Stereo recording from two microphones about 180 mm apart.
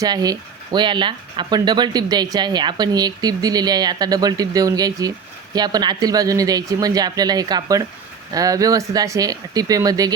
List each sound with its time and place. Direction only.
0.0 s speech: 20° right (ahead or behind)